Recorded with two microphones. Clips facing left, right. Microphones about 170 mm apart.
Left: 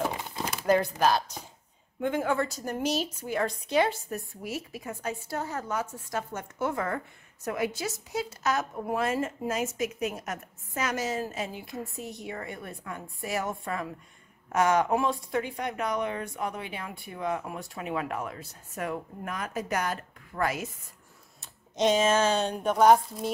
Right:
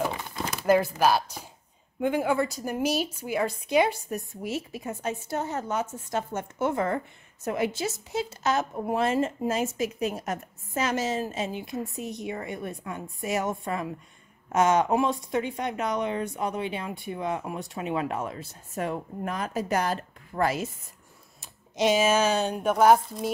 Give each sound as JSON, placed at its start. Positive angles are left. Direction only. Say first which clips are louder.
{"t": 0.7, "sound": "a woman's voice", "louder": "right 2 dB", "side_deg": -5}
{"t": 21.4, "sound": "speech", "louder": "right 1 dB", "side_deg": -10}